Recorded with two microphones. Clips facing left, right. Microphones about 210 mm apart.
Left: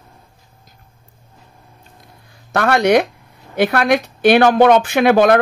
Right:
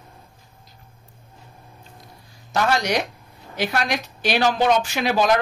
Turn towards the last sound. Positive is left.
turn(degrees=60)  # may be behind; listen again after turning